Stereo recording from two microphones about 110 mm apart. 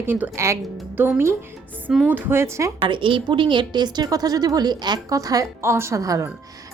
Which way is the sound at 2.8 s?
50° right (ahead or behind).